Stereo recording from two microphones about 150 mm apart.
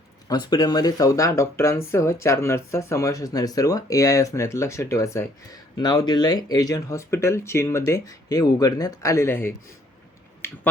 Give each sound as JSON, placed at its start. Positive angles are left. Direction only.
{"t": 0.3, "sound": "speech", "side_deg": 25}
{"t": 10.4, "sound": "finger snapping", "side_deg": 15}